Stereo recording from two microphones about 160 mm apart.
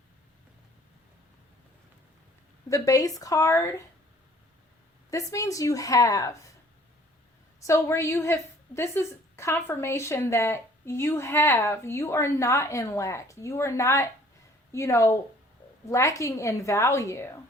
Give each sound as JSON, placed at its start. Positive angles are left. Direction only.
{"t": 2.6, "sound": "a woman's voice", "side_deg": 20}
{"t": 5.1, "sound": "a woman's voice", "side_deg": 20}
{"t": 7.7, "sound": "a woman's voice", "side_deg": 15}